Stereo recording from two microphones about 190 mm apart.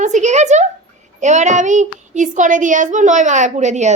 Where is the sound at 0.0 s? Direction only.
40° right (ahead or behind).